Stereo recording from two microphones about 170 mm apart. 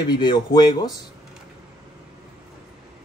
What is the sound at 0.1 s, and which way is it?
Speech, 25° left (ahead or behind).